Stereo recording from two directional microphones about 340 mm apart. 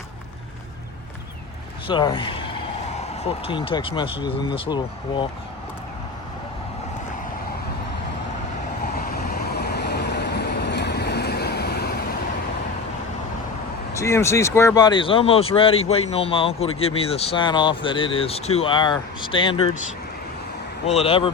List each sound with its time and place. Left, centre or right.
1.9 s speech: centre
9.0 s vehicle: left
13.9 s speech: centre
20.8 s speech: centre